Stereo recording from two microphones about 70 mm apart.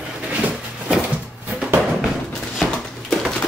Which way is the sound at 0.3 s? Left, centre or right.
Centre.